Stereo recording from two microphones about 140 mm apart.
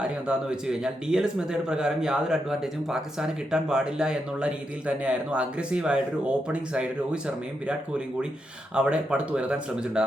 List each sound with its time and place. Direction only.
0.0 s speech: 5° right (ahead or behind)